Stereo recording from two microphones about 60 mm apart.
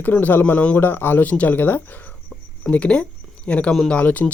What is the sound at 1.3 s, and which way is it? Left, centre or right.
Speech, left.